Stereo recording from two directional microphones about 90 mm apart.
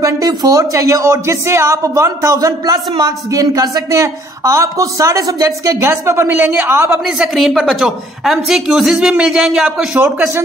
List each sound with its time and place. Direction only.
0.0 s speech: 40° right (ahead or behind); by 6.8 s 20° right (ahead or behind)
7.2 s a woman's voice: centre (ahead or behind)
9.9 s speech: 20° right (ahead or behind)